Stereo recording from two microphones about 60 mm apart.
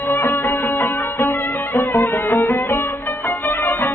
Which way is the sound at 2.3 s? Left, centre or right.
Left.